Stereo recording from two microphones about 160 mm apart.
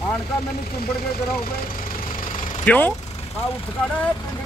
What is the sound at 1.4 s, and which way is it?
Vehicle, 65° left (ahead or behind).